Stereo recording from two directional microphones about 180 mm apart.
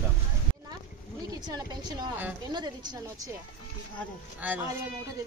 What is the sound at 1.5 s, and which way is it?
A woman's voice, 25° right (ahead or behind).